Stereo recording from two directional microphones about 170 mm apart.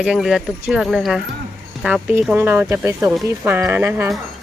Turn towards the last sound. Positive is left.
turn(degrees=-15)  # may be behind; listen again after turning